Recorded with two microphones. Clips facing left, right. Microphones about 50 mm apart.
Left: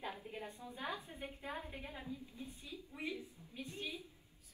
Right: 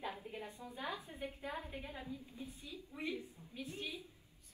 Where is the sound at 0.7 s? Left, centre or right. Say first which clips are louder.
Right 1 dB; left.